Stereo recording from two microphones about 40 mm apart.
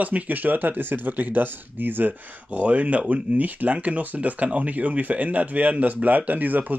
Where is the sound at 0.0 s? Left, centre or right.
Right.